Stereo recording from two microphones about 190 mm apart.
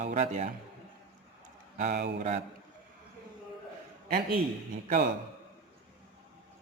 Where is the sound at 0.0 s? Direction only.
40° right (ahead or behind).